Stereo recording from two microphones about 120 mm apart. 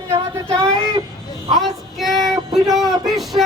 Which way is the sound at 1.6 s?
Centre (ahead or behind).